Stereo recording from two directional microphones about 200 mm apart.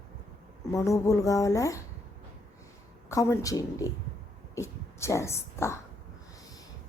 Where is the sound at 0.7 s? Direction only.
15° left (ahead or behind).